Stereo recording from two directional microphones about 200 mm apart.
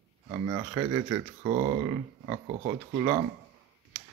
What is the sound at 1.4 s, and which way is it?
Speech, 30° right (ahead or behind).